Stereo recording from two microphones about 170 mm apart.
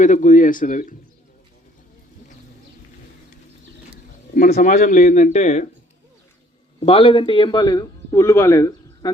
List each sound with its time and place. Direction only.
0.0 s speech: 45° left (ahead or behind)
4.4 s speech: 55° left (ahead or behind)
6.7 s a man's voice: 35° left (ahead or behind)